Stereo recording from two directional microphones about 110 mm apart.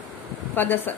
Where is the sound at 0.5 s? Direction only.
20° left (ahead or behind).